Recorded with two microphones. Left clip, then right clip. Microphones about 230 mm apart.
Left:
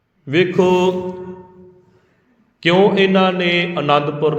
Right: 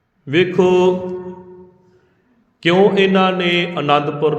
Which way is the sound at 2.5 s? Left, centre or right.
Centre.